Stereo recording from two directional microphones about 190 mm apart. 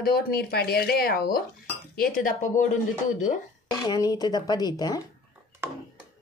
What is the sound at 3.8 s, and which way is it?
Speech, 20° left (ahead or behind).